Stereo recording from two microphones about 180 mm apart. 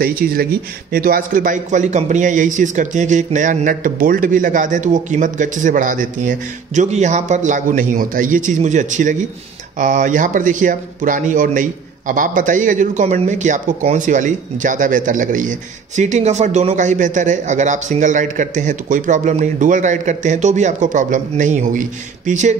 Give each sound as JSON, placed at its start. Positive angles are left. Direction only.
{"t": 0.2, "sound": "speech", "side_deg": -60}